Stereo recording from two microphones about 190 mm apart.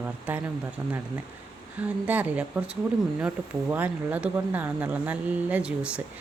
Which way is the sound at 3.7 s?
10° right (ahead or behind).